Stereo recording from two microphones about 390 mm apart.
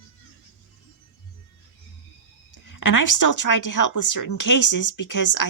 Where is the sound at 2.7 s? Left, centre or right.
Left.